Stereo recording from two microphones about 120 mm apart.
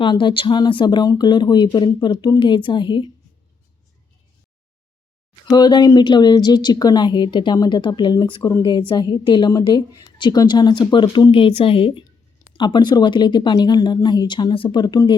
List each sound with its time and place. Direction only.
0.0 s speech: 40° left (ahead or behind)
5.5 s speech: 35° left (ahead or behind)